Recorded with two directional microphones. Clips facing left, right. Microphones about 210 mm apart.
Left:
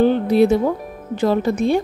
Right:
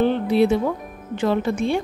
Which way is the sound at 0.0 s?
40° left (ahead or behind).